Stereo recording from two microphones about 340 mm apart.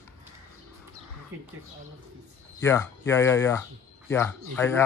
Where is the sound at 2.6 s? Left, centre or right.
Centre.